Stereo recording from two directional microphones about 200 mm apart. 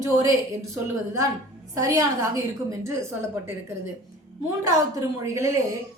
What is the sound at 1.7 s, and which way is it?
A woman's voice, 15° right (ahead or behind).